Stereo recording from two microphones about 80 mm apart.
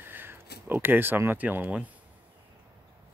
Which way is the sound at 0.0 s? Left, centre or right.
Right.